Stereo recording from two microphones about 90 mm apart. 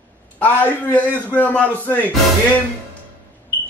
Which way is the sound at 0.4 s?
20° left (ahead or behind).